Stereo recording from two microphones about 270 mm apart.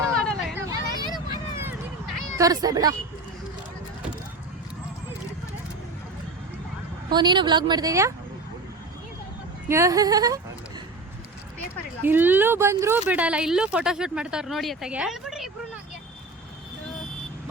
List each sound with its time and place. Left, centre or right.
0.2 s hubbub: centre
0.5 s vehicle: centre
2.4 s a woman's voice: centre
7.1 s a woman's voice: centre
9.6 s a woman's voice: centre
12.0 s speech: centre